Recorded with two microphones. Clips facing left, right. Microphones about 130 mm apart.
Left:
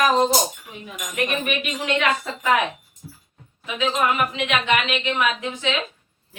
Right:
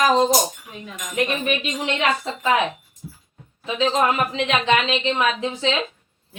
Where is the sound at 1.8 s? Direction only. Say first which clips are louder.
Left 2 dB; 25° right (ahead or behind).